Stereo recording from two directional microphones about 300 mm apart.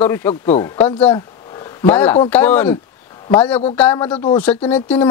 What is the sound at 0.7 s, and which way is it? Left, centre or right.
Speech, centre.